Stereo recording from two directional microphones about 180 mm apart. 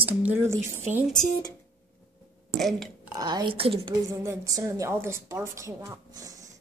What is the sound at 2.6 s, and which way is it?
Speech, centre (ahead or behind).